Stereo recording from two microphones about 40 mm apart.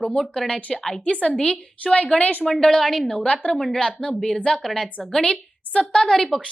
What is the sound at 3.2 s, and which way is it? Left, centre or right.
Speech, left.